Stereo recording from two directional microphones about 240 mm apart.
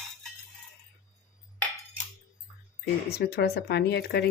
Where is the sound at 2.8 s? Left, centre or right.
Left.